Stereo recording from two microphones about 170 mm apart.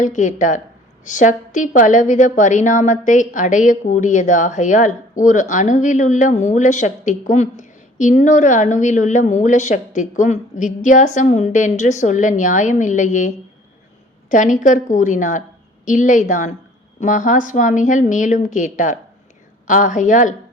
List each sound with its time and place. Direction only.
0.0 s a woman's voice: 45° left (ahead or behind)